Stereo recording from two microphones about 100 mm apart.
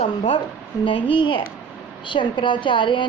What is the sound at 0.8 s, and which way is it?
A woman's voice, 60° left (ahead or behind).